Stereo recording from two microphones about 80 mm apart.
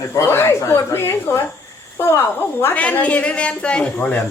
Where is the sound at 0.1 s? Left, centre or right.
Left.